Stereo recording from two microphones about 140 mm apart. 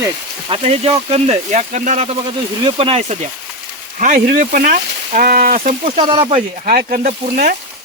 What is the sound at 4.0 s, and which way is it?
Speech, 75° right (ahead or behind).